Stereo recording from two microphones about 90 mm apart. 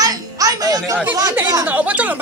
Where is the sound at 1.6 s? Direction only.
15° right (ahead or behind).